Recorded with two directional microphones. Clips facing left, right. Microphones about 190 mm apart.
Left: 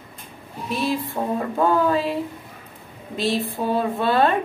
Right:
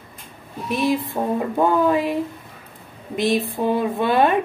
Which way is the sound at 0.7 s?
20° right (ahead or behind).